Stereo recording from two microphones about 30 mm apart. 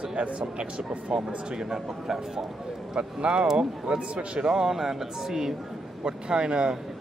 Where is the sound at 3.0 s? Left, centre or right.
Right.